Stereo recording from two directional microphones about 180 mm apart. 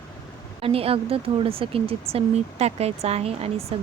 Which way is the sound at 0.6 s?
30° right (ahead or behind).